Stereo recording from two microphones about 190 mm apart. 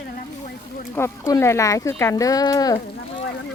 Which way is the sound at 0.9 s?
15° left (ahead or behind).